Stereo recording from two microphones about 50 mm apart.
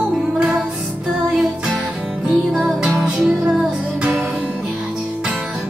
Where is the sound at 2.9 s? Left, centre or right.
Right.